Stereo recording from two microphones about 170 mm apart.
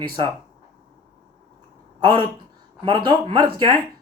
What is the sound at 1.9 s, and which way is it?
Speech, 25° right (ahead or behind).